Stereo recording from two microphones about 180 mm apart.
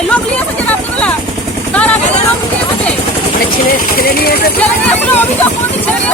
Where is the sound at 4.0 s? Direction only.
55° left (ahead or behind).